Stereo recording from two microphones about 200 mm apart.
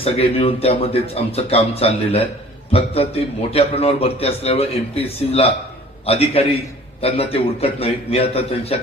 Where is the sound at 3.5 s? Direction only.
30° left (ahead or behind).